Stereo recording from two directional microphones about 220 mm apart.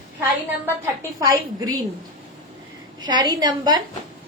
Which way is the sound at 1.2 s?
15° right (ahead or behind).